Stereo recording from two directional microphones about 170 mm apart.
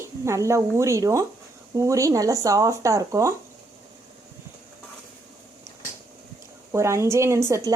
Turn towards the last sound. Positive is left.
turn(degrees=-15)  # may be behind; listen again after turning